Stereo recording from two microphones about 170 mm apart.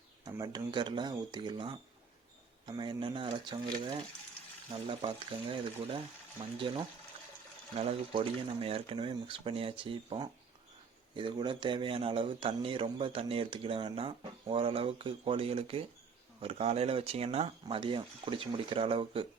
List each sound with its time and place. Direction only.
0.3 s speech: 25° right (ahead or behind)
4.7 s speech: 30° right (ahead or behind)